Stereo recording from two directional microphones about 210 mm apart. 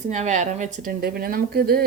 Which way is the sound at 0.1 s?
35° right (ahead or behind).